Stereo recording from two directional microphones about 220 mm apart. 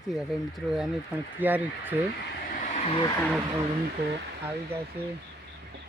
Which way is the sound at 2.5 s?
30° left (ahead or behind).